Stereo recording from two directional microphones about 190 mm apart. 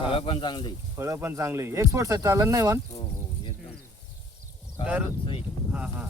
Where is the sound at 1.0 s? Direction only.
15° right (ahead or behind).